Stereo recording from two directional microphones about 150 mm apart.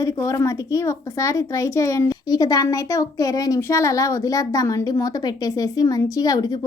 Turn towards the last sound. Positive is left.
turn(degrees=25)  # may be behind; listen again after turning